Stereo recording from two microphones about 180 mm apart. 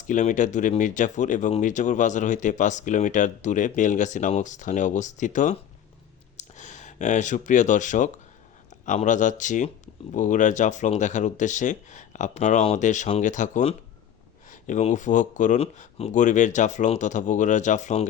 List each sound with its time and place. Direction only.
0.1 s speech: 45° left (ahead or behind)